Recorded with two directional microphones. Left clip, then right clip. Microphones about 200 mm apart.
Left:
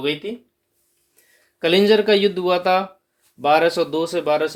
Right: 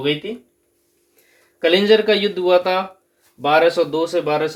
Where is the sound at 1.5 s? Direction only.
45° left (ahead or behind).